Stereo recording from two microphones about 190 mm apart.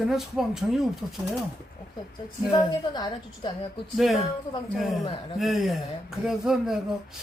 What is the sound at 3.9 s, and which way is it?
Speech, centre (ahead or behind).